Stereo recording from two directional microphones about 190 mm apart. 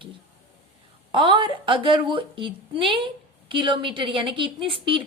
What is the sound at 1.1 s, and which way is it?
A woman's voice, 25° right (ahead or behind).